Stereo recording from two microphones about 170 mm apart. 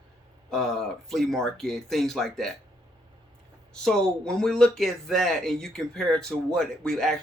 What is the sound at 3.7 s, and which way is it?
Speech, 5° left (ahead or behind).